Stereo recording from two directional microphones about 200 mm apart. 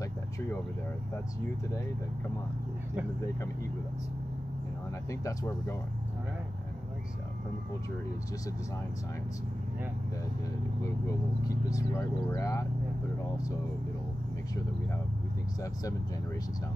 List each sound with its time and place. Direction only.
5.2 s speech: 15° left (ahead or behind)
11.4 s speech: 20° left (ahead or behind)